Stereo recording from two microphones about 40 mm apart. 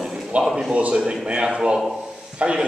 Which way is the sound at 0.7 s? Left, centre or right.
Right.